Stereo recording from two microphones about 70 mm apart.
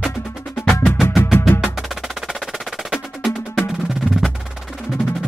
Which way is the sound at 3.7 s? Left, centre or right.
Centre.